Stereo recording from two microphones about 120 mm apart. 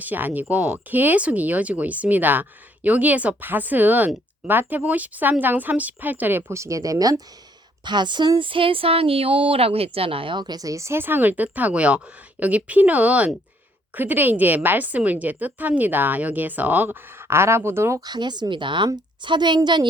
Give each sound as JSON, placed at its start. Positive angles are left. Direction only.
{"t": 0.0, "sound": "a woman's voice", "side_deg": -15}